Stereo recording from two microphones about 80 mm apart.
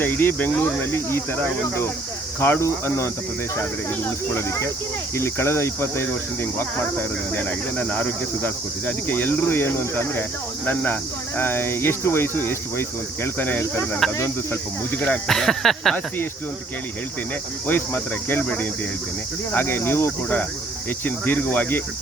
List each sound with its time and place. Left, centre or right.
0.0 s speech: left
11.3 s speech: left
15.3 s speech: centre
17.7 s speech: left
19.5 s speech: left